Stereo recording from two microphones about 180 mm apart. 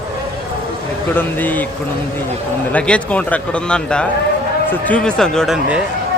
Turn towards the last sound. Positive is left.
turn(degrees=5)  # may be behind; listen again after turning